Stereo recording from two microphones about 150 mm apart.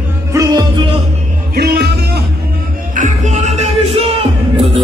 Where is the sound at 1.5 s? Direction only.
90° right.